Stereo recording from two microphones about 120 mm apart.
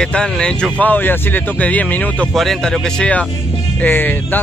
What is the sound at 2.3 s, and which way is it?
A man's voice, centre (ahead or behind).